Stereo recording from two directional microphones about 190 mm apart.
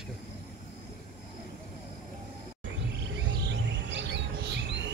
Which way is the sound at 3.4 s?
65° right (ahead or behind).